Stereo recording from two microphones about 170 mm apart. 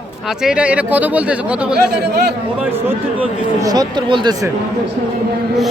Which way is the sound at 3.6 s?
20° right (ahead or behind).